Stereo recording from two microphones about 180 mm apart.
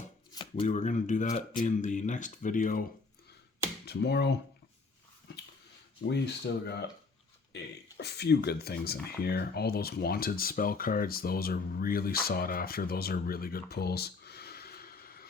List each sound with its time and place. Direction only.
0.3 s shuffling cards: 30° left (ahead or behind)
0.7 s speech: 40° left (ahead or behind)
3.8 s speech: 70° left (ahead or behind)
6.1 s speech: 70° left (ahead or behind)